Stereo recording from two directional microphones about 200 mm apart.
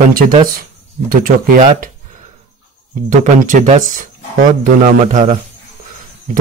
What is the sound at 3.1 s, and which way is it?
Speech, 40° right (ahead or behind).